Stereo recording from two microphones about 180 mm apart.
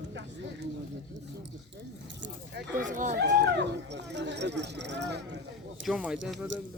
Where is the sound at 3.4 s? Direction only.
75° right (ahead or behind).